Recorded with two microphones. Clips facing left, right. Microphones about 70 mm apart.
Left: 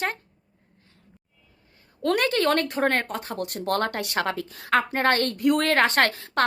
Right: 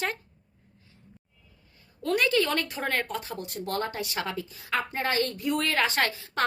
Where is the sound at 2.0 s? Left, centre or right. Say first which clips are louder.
Left 3 dB; left.